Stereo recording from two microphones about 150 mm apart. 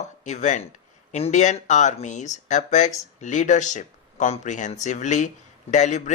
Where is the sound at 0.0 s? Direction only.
50° left (ahead or behind).